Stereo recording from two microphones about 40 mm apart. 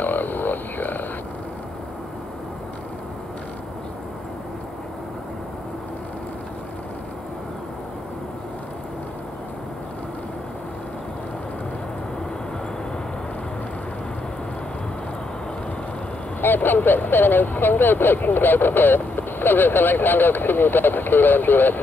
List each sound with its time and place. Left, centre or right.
0.0 s frog: left
16.3 s speech: left